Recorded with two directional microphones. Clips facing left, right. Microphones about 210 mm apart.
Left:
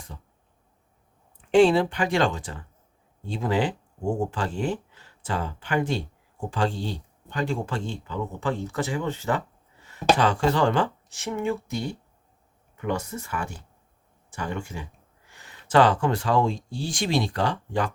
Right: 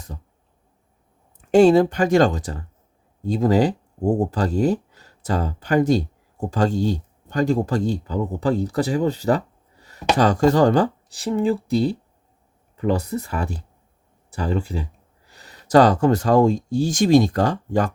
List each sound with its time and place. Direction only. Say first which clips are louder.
1.4 s speech: right 5 dB; 40° right (ahead or behind)